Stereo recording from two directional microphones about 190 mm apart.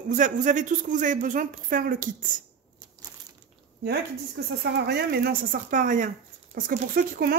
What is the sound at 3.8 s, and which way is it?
A man's voice, 60° right (ahead or behind).